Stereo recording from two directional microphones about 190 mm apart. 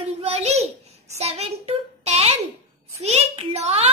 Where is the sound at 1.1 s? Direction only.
35° right (ahead or behind).